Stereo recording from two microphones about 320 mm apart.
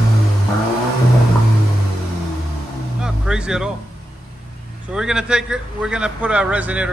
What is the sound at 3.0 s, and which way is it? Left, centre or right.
Vehicle, centre.